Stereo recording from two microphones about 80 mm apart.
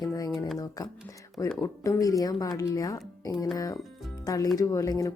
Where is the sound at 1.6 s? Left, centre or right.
Left.